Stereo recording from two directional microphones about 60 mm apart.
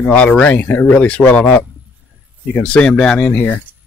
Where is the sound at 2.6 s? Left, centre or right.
Centre.